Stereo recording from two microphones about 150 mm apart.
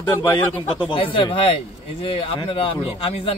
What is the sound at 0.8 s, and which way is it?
Speech, 35° left (ahead or behind).